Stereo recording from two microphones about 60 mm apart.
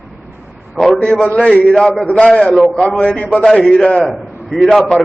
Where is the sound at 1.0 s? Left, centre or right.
Centre.